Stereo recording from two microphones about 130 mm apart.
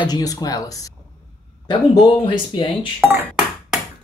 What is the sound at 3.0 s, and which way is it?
Cutlery, 15° right (ahead or behind).